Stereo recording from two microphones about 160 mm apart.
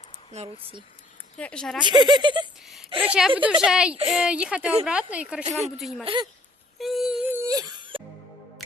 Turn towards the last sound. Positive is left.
turn(degrees=-25)  # may be behind; listen again after turning